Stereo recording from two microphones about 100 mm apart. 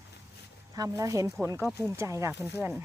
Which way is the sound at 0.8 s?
35° right (ahead or behind).